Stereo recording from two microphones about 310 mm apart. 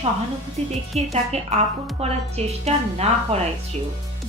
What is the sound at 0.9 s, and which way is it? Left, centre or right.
Speech, right.